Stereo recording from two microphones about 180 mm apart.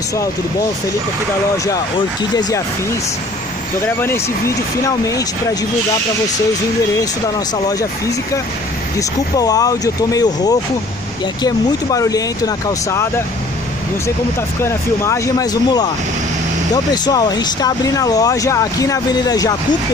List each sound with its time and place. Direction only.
1.7 s speech: 20° left (ahead or behind)
4.0 s speech: 15° left (ahead or behind)
9.4 s speech: 20° left (ahead or behind)
14.6 s speech: 15° left (ahead or behind)